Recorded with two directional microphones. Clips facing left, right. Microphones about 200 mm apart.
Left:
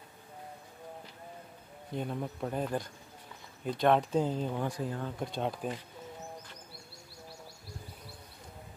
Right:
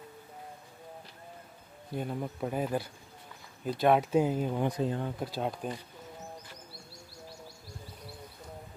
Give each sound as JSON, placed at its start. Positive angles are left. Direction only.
{"t": 2.0, "sound": "speech", "side_deg": -5}
{"t": 5.2, "sound": "speech", "side_deg": -5}